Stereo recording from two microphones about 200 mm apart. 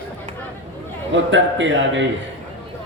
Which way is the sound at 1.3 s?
70° right (ahead or behind).